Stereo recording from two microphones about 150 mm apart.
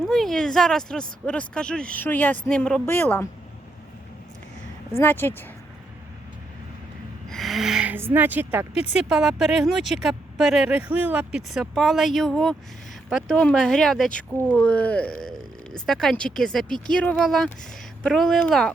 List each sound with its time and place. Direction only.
0.0 s speech: centre (ahead or behind)
4.9 s speech: 15° left (ahead or behind)
7.3 s speech: centre (ahead or behind)